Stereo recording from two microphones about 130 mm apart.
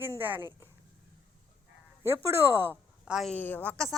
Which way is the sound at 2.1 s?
15° right (ahead or behind).